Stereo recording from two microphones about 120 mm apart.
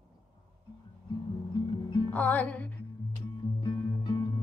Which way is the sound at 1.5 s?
35° left (ahead or behind).